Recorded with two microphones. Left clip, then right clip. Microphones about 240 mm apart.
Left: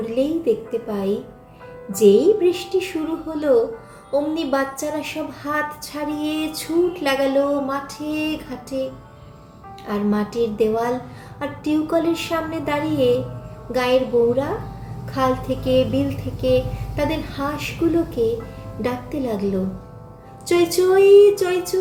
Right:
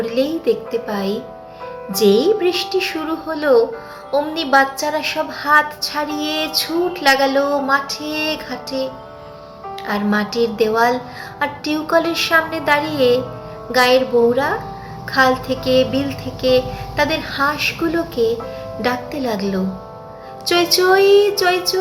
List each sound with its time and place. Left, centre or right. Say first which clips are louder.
0.0 s a woman's voice: right 3 dB; centre
2.0 s speech: even; right
2.4 s a woman's voice: right 2 dB; centre